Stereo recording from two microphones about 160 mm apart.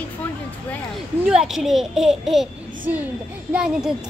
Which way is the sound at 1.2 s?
5° right (ahead or behind).